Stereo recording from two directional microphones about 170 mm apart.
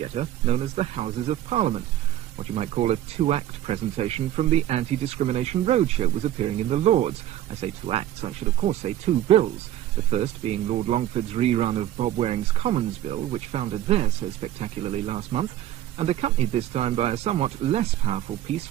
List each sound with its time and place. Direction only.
0.0 s speech: 40° right (ahead or behind)